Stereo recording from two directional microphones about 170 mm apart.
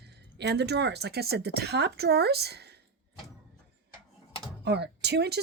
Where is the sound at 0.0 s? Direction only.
80° right.